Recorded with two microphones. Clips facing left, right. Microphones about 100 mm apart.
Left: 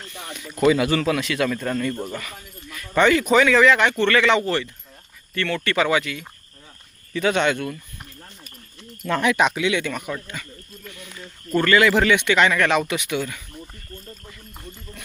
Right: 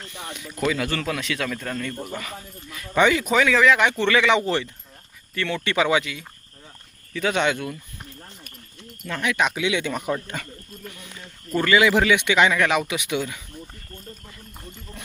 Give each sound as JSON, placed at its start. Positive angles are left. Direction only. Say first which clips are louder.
{"t": 0.1, "sound": "speech", "louder": "right 1 dB", "side_deg": -15}
{"t": 0.4, "sound": "a man's voice", "louder": "left 6 dB", "side_deg": 0}
{"t": 0.7, "sound": "a man's voice", "louder": "left 7 dB", "side_deg": 10}
{"t": 2.2, "sound": "speech", "louder": "right 2 dB", "side_deg": -20}
{"t": 4.4, "sound": "speech", "louder": "even", "side_deg": -20}
{"t": 5.3, "sound": "speech", "louder": "left 2 dB", "side_deg": -10}
{"t": 7.1, "sound": "a man's voice", "louder": "left 2 dB", "side_deg": 0}
{"t": 9.5, "sound": "speech", "louder": "left 2 dB", "side_deg": -10}
{"t": 11.5, "sound": "speech", "louder": "left 1 dB", "side_deg": -10}